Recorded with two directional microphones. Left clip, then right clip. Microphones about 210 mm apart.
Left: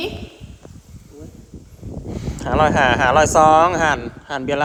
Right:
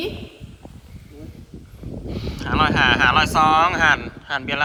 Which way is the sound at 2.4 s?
35° left (ahead or behind).